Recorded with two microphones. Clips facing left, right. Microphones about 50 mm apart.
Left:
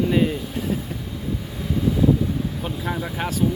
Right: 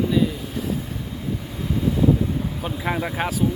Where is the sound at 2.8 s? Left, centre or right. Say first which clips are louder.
Right 4 dB; right.